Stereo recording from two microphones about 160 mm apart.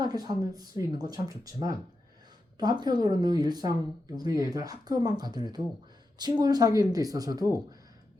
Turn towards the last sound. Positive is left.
turn(degrees=-25)  # may be behind; listen again after turning